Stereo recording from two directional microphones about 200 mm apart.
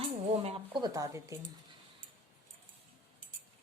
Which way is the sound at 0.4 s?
25° right (ahead or behind).